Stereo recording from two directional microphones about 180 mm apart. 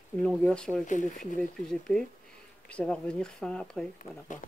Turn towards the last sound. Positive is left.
turn(degrees=5)  # may be behind; listen again after turning